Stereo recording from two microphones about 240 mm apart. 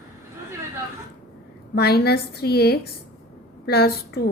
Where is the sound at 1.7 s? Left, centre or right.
Left.